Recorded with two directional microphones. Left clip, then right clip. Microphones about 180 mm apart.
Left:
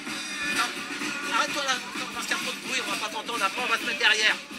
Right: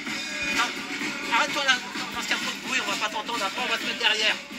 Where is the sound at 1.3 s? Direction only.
Centre (ahead or behind).